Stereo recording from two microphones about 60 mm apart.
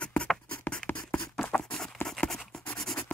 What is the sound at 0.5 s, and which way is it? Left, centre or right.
Writing, centre.